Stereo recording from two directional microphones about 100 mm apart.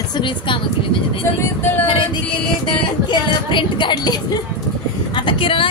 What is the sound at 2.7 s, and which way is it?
Music, 50° left (ahead or behind).